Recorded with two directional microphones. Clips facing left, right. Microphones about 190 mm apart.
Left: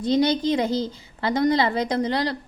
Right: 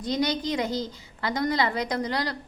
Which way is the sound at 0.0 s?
30° left (ahead or behind).